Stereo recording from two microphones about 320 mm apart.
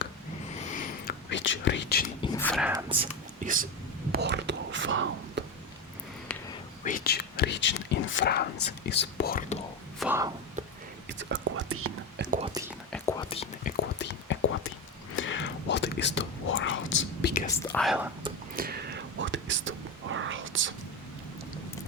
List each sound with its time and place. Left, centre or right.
0.7 s whispering: left
2.2 s speech: centre
2.7 s speech: centre; by 5.4 s right
6.8 s speech: left
10.0 s speech: centre
11.2 s speech: right
12.6 s whispering: centre
12.9 s whispering: centre
13.7 s whispering: left
17.7 s speech: centre
18.5 s whispering: right